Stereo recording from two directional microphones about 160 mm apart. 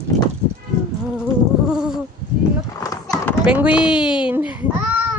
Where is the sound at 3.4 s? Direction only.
5° right (ahead or behind).